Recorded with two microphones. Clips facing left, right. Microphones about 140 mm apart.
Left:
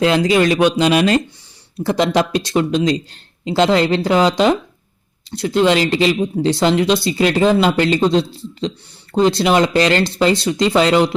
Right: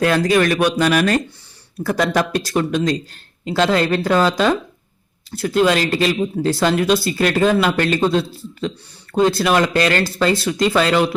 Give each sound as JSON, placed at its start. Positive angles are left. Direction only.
{"t": 0.0, "sound": "speech", "side_deg": 20}